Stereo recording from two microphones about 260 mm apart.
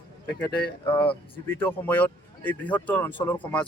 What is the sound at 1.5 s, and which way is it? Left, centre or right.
A man's voice, centre.